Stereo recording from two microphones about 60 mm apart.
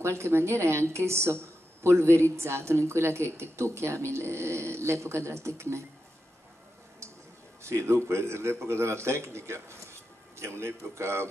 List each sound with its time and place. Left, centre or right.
0.0 s a woman's voice: right
7.6 s a woman's voice: right